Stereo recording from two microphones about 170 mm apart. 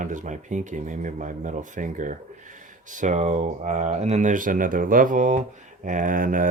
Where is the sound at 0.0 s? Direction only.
50° right (ahead or behind).